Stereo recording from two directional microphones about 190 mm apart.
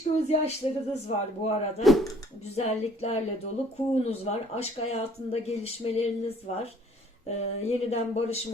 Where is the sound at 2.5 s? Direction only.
35° left (ahead or behind).